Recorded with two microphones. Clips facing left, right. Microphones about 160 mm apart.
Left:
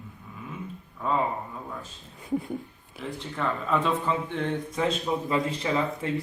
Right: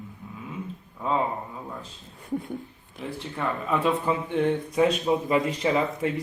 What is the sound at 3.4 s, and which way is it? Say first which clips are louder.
Speech: even; 15° right (ahead or behind).